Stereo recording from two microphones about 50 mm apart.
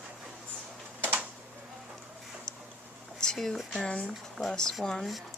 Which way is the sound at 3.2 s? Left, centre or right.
Centre.